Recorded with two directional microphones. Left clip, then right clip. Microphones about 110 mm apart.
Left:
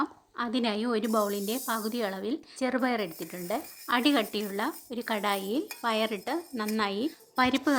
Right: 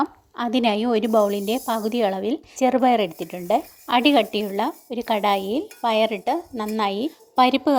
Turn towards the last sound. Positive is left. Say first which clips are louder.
# right 9 dB
turn(degrees=-35)  # may be behind; listen again after turning